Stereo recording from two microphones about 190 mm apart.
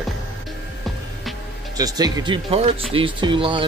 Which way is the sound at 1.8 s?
20° right (ahead or behind).